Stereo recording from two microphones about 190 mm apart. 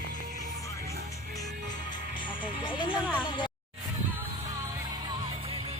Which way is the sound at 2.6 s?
25° left (ahead or behind).